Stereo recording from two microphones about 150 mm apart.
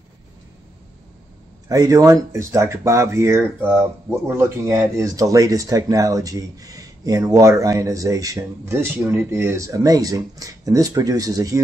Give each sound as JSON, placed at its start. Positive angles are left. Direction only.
{"t": 1.7, "sound": "speech", "side_deg": -20}